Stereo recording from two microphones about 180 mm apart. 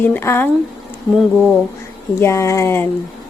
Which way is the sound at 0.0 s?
10° left (ahead or behind).